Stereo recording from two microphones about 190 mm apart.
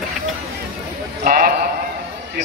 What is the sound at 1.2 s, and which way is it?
Sheep, 50° right (ahead or behind).